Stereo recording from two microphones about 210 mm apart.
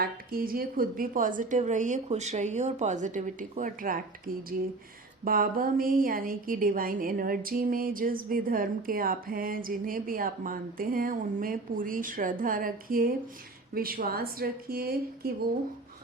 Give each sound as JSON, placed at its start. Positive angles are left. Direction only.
{"t": 0.0, "sound": "a woman's voice", "side_deg": -45}
{"t": 5.2, "sound": "a woman's voice", "side_deg": -45}